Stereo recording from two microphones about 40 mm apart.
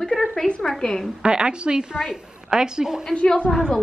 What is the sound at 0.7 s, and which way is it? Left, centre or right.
Speech, centre.